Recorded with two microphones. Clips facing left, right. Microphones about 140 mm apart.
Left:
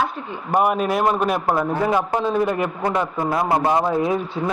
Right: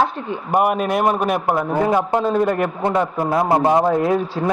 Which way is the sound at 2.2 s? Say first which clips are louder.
Right 2 dB; 50° right (ahead or behind).